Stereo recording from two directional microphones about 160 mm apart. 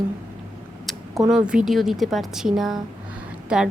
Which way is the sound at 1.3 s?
5° right (ahead or behind).